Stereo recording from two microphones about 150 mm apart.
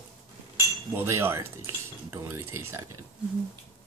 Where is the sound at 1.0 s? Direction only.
15° right (ahead or behind).